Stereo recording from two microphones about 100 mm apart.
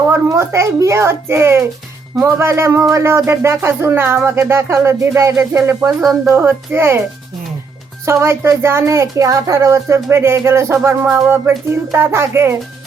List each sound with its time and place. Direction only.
0.1 s speech: 25° right (ahead or behind)
8.0 s speech: 25° right (ahead or behind)